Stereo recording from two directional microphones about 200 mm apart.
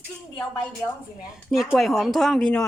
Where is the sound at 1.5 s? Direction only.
Centre (ahead or behind).